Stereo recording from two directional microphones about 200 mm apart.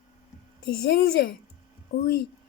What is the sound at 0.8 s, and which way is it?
Speech, 50° left (ahead or behind).